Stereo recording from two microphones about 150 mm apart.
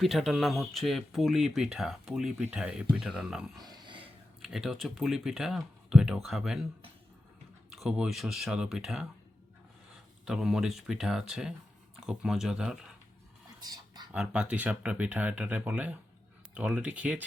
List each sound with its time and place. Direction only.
0.0 s speech: centre (ahead or behind)
3.6 s a sound: 30° right (ahead or behind)
4.4 s speech: centre (ahead or behind)
7.7 s speech: centre (ahead or behind)
10.2 s speech: 5° right (ahead or behind)
13.6 s whispering: 30° right (ahead or behind)
14.1 s speech: 10° right (ahead or behind)